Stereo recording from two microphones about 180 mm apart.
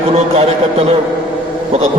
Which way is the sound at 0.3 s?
35° right (ahead or behind).